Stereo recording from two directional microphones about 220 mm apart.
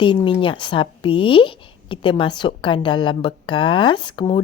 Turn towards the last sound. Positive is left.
turn(degrees=20)  # may be behind; listen again after turning